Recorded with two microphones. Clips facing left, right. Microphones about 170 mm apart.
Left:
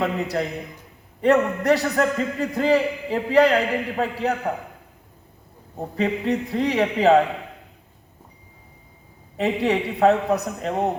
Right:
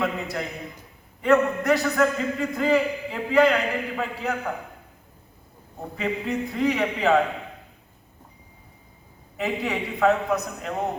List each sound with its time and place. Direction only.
0.0 s a man's voice: 35° left (ahead or behind)
6.0 s a man's voice: 35° left (ahead or behind)
9.4 s a man's voice: 30° left (ahead or behind)